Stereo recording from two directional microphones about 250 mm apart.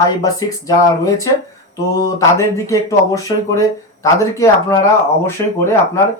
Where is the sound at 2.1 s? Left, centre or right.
Centre.